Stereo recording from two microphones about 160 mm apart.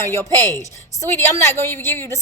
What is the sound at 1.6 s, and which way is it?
Speech, 15° left (ahead or behind).